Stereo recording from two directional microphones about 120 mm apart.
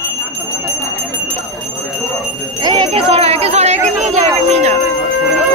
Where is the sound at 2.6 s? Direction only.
40° right (ahead or behind).